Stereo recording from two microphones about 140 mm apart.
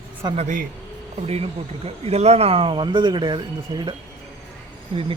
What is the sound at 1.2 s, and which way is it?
Speech, 50° right (ahead or behind).